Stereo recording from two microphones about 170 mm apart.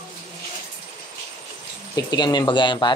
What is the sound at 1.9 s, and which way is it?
Speech, 25° left (ahead or behind).